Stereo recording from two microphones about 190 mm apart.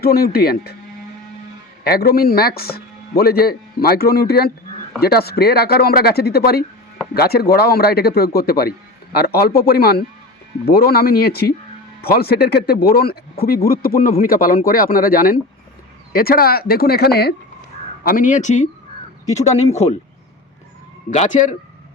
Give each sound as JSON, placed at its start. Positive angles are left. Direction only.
{"t": 0.0, "sound": "speech", "side_deg": 55}
{"t": 1.8, "sound": "speech", "side_deg": 55}
{"t": 18.0, "sound": "speech", "side_deg": 45}
{"t": 21.1, "sound": "speech", "side_deg": 40}